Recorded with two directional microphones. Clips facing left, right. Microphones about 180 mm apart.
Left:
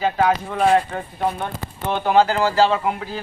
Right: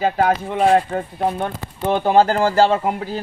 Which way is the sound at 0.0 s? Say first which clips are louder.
Right 1 dB; 50° right (ahead or behind).